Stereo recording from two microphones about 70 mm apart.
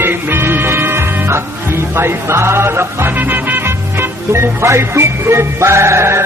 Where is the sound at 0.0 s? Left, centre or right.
Right.